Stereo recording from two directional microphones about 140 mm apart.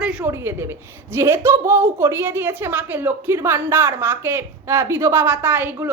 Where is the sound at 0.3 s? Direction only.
20° right (ahead or behind).